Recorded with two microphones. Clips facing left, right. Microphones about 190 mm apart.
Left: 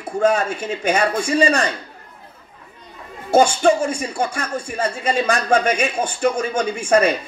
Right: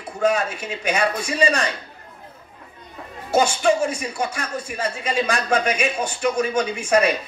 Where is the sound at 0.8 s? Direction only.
45° left (ahead or behind).